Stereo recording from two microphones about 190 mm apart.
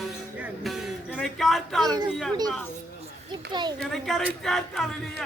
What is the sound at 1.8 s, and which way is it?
Speech, 20° right (ahead or behind).